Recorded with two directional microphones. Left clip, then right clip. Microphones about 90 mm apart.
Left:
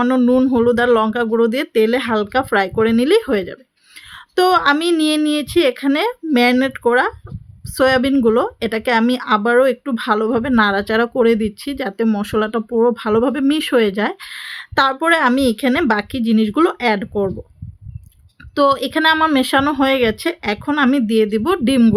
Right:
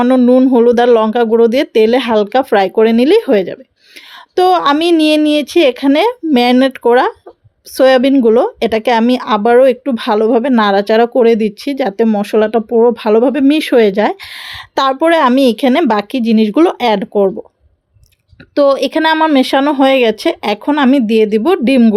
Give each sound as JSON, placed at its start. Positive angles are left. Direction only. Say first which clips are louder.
{"t": 0.0, "sound": "speech", "louder": "right 6 dB", "side_deg": -15}
{"t": 0.5, "sound": "speech", "louder": "right 6 dB", "side_deg": -25}
{"t": 18.5, "sound": "speech", "louder": "right 5 dB", "side_deg": -20}
{"t": 19.1, "sound": "speech", "louder": "right 4 dB", "side_deg": -15}
{"t": 19.9, "sound": "speech", "louder": "right 6 dB", "side_deg": -30}